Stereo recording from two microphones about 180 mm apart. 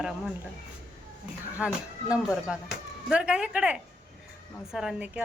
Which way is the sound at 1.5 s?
5° right (ahead or behind).